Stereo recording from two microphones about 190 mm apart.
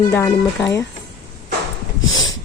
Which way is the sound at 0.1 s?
10° left (ahead or behind).